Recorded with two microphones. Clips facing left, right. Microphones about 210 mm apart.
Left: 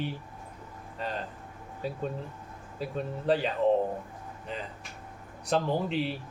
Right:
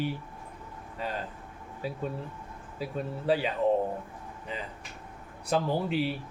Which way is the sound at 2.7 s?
5° right (ahead or behind).